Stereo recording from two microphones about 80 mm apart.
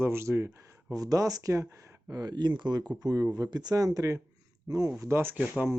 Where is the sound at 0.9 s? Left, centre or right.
Right.